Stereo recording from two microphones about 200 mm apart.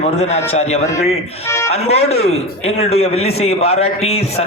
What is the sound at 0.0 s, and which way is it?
Speech, 30° left (ahead or behind).